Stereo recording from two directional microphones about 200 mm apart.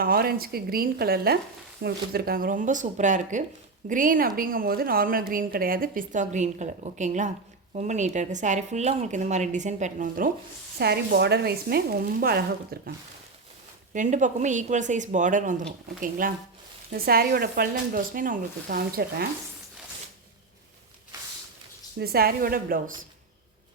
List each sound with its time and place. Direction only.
0.0 s a woman's voice: 50° right (ahead or behind)
10.8 s a woman's voice: 55° right (ahead or behind)
13.9 s a woman's voice: 40° right (ahead or behind)
21.9 s a woman's voice: 50° right (ahead or behind)